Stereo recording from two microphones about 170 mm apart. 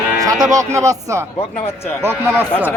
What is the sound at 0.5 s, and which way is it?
Speech, 20° right (ahead or behind).